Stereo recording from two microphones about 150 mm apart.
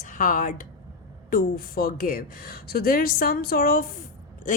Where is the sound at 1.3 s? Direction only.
75° left (ahead or behind).